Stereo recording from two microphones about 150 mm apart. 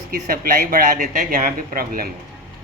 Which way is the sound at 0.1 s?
70° right (ahead or behind).